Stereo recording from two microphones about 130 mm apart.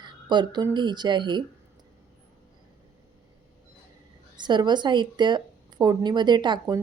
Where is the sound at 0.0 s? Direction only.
35° right (ahead or behind).